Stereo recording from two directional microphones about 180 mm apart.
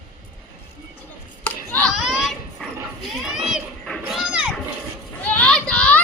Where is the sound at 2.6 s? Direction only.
5° left (ahead or behind).